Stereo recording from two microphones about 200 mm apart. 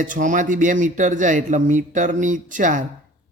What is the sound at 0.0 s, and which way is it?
Speech, 40° right (ahead or behind).